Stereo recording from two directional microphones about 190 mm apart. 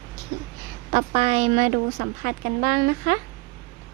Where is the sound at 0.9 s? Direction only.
35° right (ahead or behind); by 3.2 s 50° right (ahead or behind).